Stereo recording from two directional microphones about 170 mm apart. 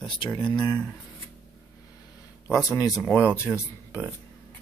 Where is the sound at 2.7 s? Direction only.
20° left (ahead or behind).